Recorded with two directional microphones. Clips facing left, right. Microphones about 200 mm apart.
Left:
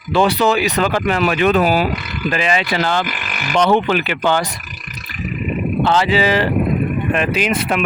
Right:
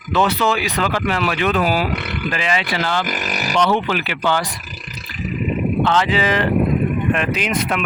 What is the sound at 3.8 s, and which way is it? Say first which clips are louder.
Speech: left 4 dB; 20° left (ahead or behind).